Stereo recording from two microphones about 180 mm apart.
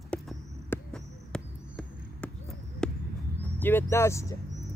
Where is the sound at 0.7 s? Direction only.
5° left (ahead or behind).